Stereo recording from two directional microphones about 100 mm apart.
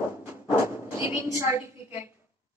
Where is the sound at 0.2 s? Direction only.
25° right (ahead or behind).